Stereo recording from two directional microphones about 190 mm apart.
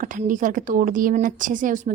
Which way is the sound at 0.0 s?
45° right (ahead or behind).